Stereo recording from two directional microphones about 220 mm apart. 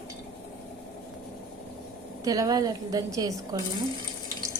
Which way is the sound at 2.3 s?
15° right (ahead or behind).